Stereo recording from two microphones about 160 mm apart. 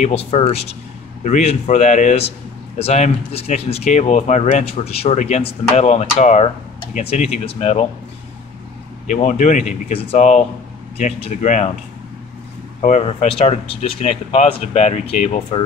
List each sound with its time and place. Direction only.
0.0 s speech: 40° left (ahead or behind)
9.0 s speech: 50° left (ahead or behind)
12.8 s speech: 45° left (ahead or behind)